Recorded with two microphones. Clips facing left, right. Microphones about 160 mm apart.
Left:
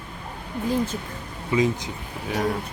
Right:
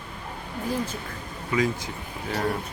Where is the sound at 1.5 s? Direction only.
20° left (ahead or behind).